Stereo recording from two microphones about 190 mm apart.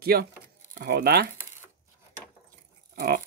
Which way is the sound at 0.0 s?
55° right (ahead or behind).